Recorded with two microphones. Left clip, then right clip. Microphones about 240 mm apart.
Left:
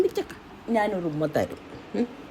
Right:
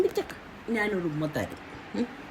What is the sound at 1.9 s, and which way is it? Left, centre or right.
Speech, centre.